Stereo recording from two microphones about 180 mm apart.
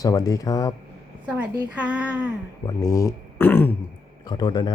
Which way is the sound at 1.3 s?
10° right (ahead or behind).